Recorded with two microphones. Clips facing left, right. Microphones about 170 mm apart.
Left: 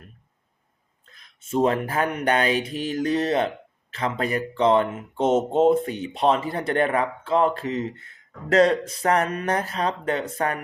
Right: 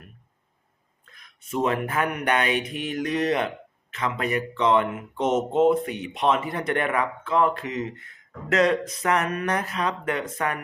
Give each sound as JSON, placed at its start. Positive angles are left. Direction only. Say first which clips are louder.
{"t": 1.0, "sound": "speech", "louder": "right 1 dB", "side_deg": 30}